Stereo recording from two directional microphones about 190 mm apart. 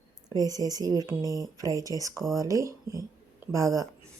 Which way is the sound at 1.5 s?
20° right (ahead or behind).